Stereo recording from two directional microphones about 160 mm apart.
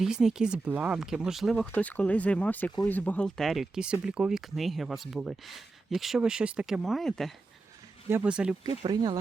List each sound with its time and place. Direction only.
0.0 s speech: 5° right (ahead or behind)
8.6 s speech: 25° right (ahead or behind)